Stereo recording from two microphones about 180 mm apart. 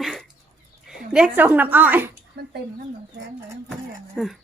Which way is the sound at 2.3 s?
70° right (ahead or behind).